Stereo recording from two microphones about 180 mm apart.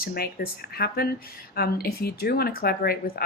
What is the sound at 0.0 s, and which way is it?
Speech, 60° left (ahead or behind).